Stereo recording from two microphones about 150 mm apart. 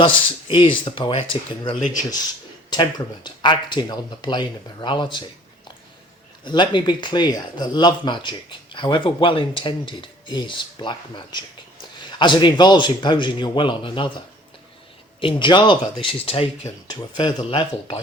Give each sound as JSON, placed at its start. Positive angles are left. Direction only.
{"t": 0.0, "sound": "speech", "side_deg": 35}
{"t": 1.7, "sound": "speech", "side_deg": 55}
{"t": 3.2, "sound": "speech", "side_deg": 30}
{"t": 6.4, "sound": "speech", "side_deg": 30}
{"t": 15.2, "sound": "speech", "side_deg": 35}